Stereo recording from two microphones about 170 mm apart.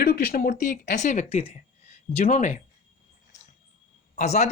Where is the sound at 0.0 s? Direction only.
60° left (ahead or behind); by 2.6 s 45° left (ahead or behind).